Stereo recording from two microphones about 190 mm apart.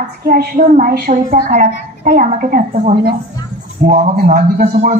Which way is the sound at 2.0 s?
45° right (ahead or behind).